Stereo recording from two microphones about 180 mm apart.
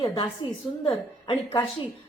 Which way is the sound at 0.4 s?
25° left (ahead or behind).